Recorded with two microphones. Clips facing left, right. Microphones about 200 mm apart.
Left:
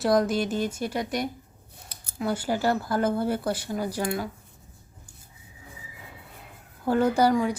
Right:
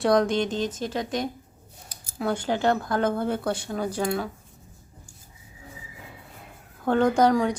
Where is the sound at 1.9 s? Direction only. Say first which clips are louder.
Right 1 dB; 60° left (ahead or behind).